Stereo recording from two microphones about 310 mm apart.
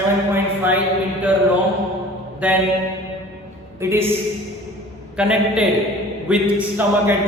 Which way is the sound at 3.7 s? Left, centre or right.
Centre.